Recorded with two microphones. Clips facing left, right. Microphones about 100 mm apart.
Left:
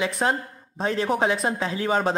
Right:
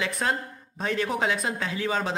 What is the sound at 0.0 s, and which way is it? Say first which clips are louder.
Speech: left 4 dB; 25° left (ahead or behind).